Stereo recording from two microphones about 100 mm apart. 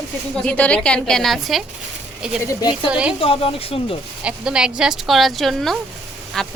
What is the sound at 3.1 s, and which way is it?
Speech, 65° left (ahead or behind).